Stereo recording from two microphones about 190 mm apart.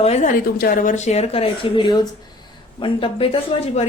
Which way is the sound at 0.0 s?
35° left (ahead or behind).